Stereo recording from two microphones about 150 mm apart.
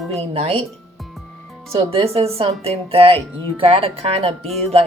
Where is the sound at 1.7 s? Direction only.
40° right (ahead or behind).